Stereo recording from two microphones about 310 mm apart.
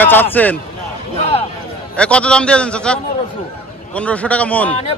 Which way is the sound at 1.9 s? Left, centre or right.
Centre.